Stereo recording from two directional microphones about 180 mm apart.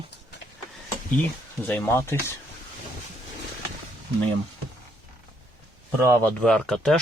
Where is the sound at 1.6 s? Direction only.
10° left (ahead or behind).